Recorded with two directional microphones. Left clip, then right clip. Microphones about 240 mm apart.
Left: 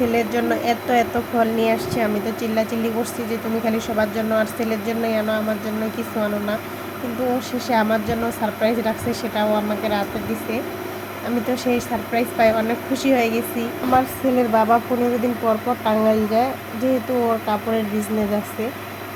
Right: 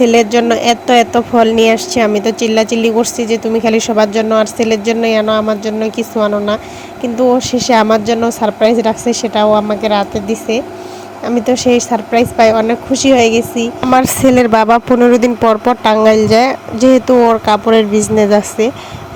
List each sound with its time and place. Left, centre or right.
0.0 s speech: right
11.5 s speech: right
13.9 s speech: right